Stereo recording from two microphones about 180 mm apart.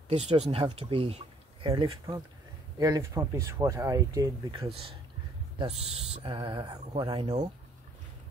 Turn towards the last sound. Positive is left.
turn(degrees=-25)  # may be behind; listen again after turning